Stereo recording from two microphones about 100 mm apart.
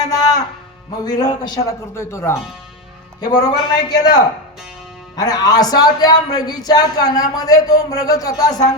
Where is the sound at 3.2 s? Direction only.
40° left (ahead or behind).